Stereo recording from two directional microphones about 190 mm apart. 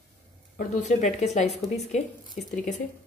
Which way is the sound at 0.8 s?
40° left (ahead or behind).